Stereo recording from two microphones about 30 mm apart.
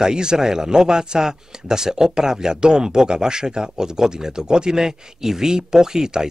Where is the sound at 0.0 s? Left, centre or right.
Right.